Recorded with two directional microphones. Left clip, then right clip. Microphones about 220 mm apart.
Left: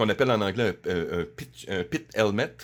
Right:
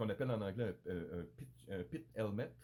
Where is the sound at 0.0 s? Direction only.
45° left (ahead or behind).